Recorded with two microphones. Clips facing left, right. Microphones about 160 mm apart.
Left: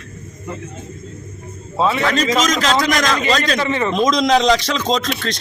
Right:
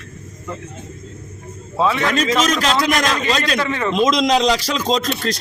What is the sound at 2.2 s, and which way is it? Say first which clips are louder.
Speech: even; 35° left (ahead or behind).